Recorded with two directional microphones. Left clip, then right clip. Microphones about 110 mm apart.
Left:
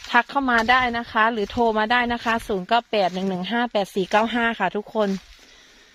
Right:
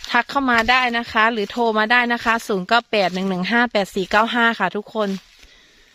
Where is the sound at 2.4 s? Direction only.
50° right (ahead or behind).